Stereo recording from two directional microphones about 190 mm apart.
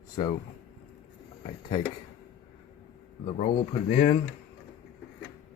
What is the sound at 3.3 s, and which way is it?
Speech, 40° left (ahead or behind).